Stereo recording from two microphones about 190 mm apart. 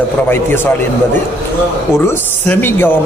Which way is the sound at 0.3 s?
10° left (ahead or behind).